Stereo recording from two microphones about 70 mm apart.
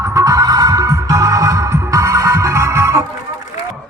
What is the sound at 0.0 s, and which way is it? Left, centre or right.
Music, right.